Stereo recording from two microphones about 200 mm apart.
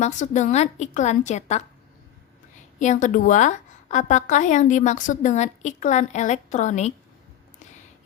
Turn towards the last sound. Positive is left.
turn(degrees=35)  # may be behind; listen again after turning